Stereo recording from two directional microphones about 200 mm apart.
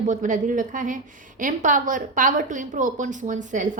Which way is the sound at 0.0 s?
40° right (ahead or behind).